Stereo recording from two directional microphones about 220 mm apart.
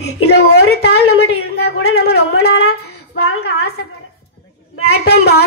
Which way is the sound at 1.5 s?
45° left (ahead or behind).